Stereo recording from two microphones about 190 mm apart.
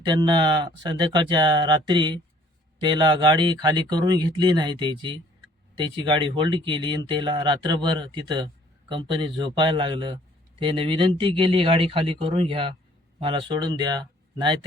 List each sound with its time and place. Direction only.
0.0 s speech: 20° right (ahead or behind)